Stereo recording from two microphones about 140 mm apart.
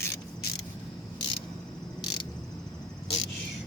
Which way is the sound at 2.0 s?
35° left (ahead or behind).